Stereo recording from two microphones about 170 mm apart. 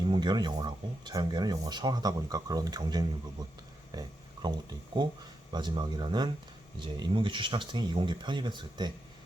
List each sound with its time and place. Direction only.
0.1 s speech: 25° right (ahead or behind)